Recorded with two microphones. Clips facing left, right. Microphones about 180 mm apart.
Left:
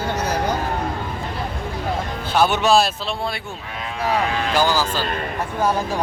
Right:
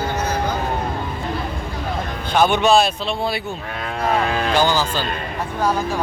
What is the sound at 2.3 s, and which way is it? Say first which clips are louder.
Speech: right 1 dB; 5° left (ahead or behind).